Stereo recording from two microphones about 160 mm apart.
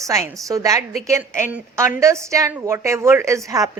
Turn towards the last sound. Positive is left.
turn(degrees=-20)  # may be behind; listen again after turning